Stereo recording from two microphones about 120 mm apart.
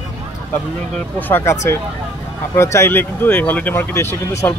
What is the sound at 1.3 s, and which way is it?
Speech, 25° left (ahead or behind).